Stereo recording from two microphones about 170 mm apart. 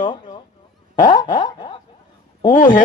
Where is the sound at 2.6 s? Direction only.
50° left (ahead or behind).